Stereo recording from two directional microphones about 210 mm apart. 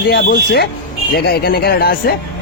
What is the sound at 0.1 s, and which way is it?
Speech, 50° left (ahead or behind).